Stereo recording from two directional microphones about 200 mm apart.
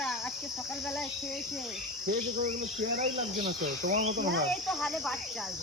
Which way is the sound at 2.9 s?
35° right (ahead or behind).